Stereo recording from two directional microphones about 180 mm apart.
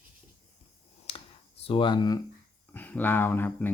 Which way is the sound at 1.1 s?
30° left (ahead or behind).